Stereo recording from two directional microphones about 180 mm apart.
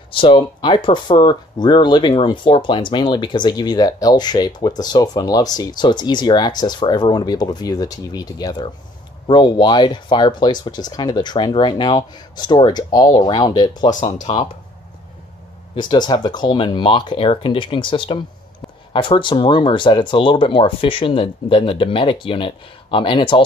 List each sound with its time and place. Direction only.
0.1 s speech: 30° left (ahead or behind)
15.7 s speech: 25° left (ahead or behind)